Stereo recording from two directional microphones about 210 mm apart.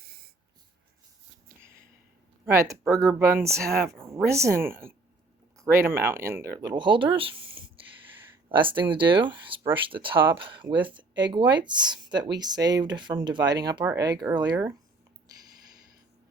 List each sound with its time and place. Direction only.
2.5 s speech: 15° right (ahead or behind)
7.6 s a sound: 25° right (ahead or behind)
8.4 s speech: 25° right (ahead or behind)